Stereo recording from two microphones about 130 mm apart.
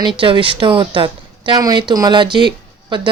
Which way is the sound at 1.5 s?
30° right (ahead or behind).